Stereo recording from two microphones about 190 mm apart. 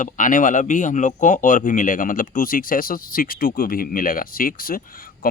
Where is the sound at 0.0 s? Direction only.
45° left (ahead or behind).